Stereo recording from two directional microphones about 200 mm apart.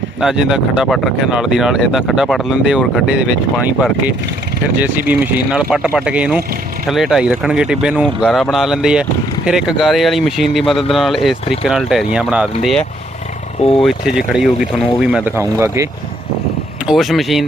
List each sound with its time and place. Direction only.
0.2 s speech: centre (ahead or behind)
13.6 s speech: 30° left (ahead or behind)
13.8 s speech: 5° right (ahead or behind)
16.8 s speech: centre (ahead or behind)